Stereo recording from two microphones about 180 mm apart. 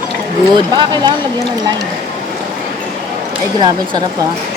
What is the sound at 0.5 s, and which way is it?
Speech, 25° right (ahead or behind).